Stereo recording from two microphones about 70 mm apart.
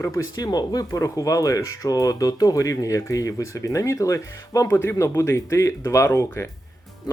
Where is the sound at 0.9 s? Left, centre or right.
Left.